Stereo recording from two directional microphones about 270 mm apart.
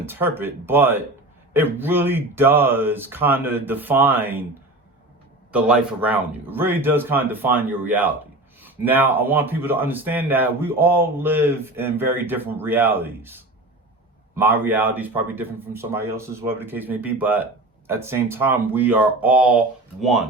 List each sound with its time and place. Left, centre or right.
0.0 s speech: centre
5.5 s speech: centre